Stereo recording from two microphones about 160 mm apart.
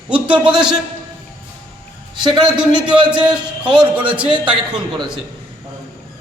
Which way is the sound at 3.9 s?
10° right (ahead or behind).